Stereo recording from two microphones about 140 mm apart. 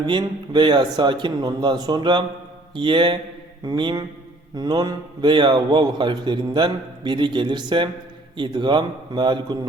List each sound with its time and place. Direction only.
0.0 s a man's voice: 35° right (ahead or behind)
3.6 s mantra: 30° right (ahead or behind)
4.5 s a man's voice: 30° right (ahead or behind)